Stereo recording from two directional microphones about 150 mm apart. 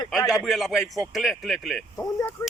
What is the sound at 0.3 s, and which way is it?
Speech, centre (ahead or behind).